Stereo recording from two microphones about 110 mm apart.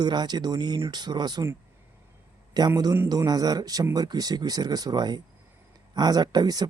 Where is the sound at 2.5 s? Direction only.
35° right (ahead or behind).